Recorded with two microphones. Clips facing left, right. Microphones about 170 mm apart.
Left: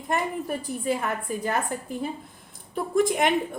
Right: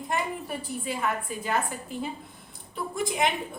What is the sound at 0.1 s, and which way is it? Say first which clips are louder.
Speech: left 4 dB; 50° left (ahead or behind).